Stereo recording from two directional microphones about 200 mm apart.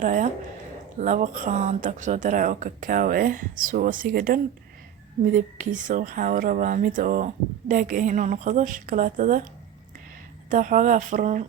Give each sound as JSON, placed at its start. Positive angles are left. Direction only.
{"t": 0.0, "sound": "speech", "side_deg": -40}
{"t": 10.5, "sound": "speech", "side_deg": -40}